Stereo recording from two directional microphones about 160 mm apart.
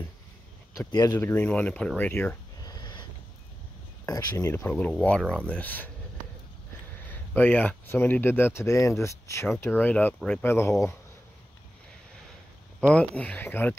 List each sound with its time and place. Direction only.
0.7 s speech: 20° left (ahead or behind)
2.6 s cat: 25° left (ahead or behind)
4.0 s speech: 20° left (ahead or behind)
7.0 s speech: 10° left (ahead or behind)
12.9 s speech: 5° left (ahead or behind)